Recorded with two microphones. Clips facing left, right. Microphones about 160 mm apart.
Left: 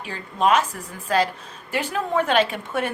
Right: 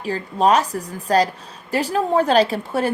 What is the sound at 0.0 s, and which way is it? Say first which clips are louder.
A woman's voice: right 4 dB; 35° right (ahead or behind).